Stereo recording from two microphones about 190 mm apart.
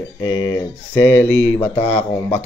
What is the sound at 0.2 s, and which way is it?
A man's voice, 20° left (ahead or behind).